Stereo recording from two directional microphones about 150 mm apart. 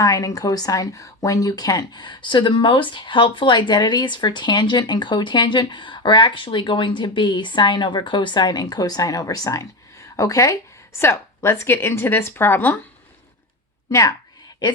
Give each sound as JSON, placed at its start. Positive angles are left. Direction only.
{"t": 0.0, "sound": "a woman's voice", "side_deg": 25}